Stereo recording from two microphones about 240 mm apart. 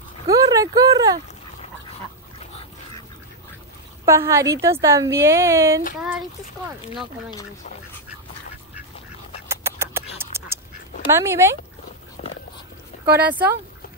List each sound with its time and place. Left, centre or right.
0.3 s speech: centre
4.0 s a woman's voice: centre
9.5 s rodents: centre
10.1 s duck: centre
11.1 s a woman's voice: centre
12.2 s biting: left
13.0 s a woman's voice: centre